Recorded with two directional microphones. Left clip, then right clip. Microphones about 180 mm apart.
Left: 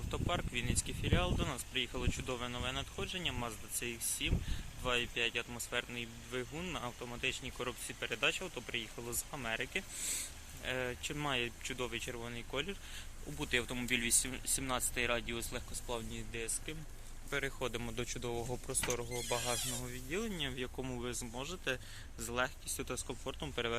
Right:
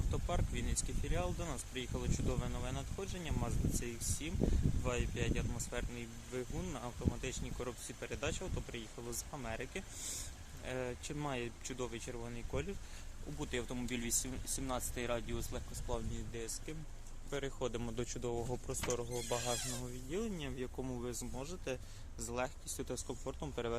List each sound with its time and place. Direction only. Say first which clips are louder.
0.1 s speech: left 4 dB; 10° right (ahead or behind)